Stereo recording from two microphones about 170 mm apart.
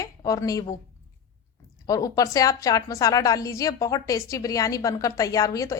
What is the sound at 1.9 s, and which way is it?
A woman's voice, 20° left (ahead or behind).